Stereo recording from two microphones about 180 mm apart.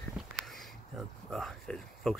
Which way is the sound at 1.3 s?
Centre (ahead or behind).